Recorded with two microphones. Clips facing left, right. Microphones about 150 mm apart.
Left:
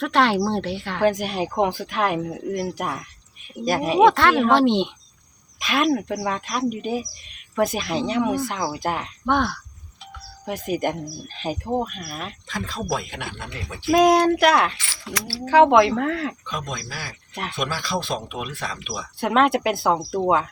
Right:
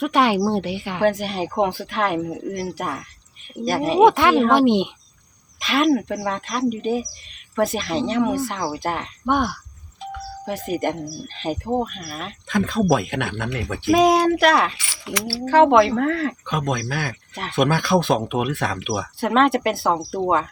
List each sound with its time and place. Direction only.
0.0 s speech: 10° right (ahead or behind)
1.0 s speech: centre (ahead or behind)
4.0 s speech: 15° right (ahead or behind)
5.5 s speech: centre (ahead or behind)
9.2 s speech: 10° right (ahead or behind)
10.4 s speech: centre (ahead or behind)
12.5 s speech: 55° right (ahead or behind)
13.9 s speech: centre (ahead or behind)
15.0 s speech: 20° right (ahead or behind)
15.3 s speech: centre (ahead or behind)
16.5 s speech: 55° right (ahead or behind)
19.2 s speech: centre (ahead or behind)